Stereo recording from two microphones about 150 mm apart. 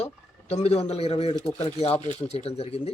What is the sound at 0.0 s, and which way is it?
Speech, 45° left (ahead or behind).